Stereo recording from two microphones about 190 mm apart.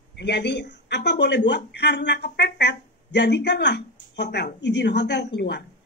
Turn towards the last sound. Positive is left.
turn(degrees=60)  # may be behind; listen again after turning